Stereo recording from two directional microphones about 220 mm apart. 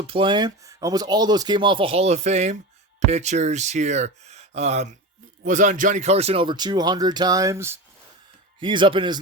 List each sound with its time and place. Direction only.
0.1 s speech: 20° right (ahead or behind)